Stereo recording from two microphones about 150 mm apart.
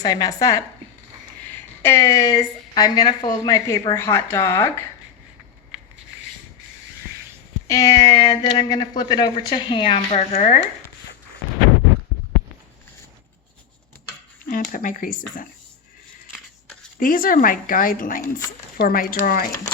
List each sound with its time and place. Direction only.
0.0 s a woman's voice: 25° left (ahead or behind)
7.7 s speech: 25° left (ahead or behind); by 10.6 s 50° left (ahead or behind)
14.5 s speech: 65° left (ahead or behind)
17.0 s speech: 65° left (ahead or behind)